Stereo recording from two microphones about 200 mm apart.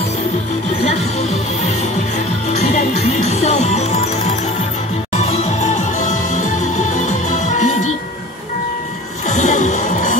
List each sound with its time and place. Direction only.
2.5 s music: 35° left (ahead or behind)
5.1 s music: 35° left (ahead or behind)
9.3 s music: 35° left (ahead or behind)